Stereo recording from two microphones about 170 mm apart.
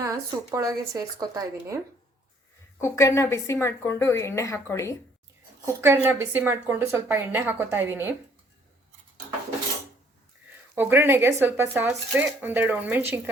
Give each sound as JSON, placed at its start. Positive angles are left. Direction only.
{"t": 0.0, "sound": "speech", "side_deg": -20}
{"t": 2.8, "sound": "a woman's voice", "side_deg": 15}
{"t": 5.6, "sound": "a woman's voice", "side_deg": -15}
{"t": 10.8, "sound": "a woman's voice", "side_deg": -15}